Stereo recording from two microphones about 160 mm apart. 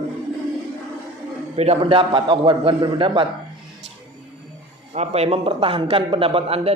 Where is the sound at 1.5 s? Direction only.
40° right (ahead or behind).